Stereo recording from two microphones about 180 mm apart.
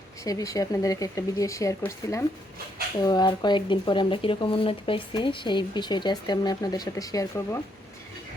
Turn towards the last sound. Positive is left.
turn(degrees=15)  # may be behind; listen again after turning